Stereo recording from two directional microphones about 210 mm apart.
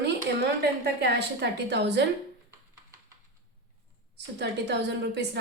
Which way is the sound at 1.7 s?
55° right (ahead or behind).